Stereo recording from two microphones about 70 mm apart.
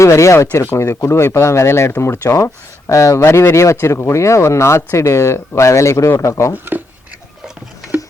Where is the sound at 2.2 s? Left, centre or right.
Left.